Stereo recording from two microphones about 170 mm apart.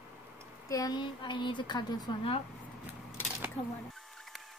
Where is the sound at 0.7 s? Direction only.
25° left (ahead or behind).